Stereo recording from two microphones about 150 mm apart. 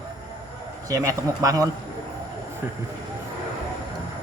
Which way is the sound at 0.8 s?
20° right (ahead or behind).